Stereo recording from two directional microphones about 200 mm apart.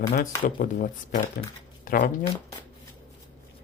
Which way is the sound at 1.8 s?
45° left (ahead or behind).